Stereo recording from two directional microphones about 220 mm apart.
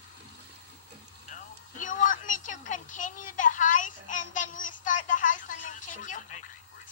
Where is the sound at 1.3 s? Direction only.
35° left (ahead or behind).